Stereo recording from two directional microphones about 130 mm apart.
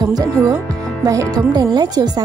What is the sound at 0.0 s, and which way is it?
A woman's voice, 30° right (ahead or behind).